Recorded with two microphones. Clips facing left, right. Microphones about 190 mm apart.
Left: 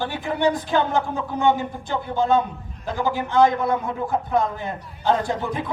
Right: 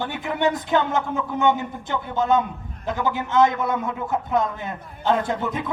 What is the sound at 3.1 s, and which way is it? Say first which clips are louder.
Speech: left 2 dB; 20° right (ahead or behind).